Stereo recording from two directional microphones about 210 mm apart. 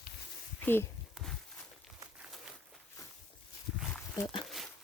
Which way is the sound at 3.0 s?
15° left (ahead or behind).